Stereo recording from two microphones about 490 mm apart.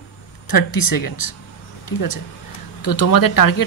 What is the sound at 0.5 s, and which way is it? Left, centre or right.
Speech, left.